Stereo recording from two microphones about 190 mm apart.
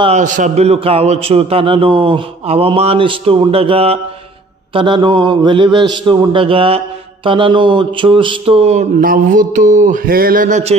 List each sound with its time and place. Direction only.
0.0 s a man's voice: 40° right (ahead or behind)